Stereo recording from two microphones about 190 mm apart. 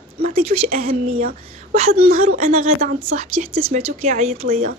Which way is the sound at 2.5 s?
35° right (ahead or behind).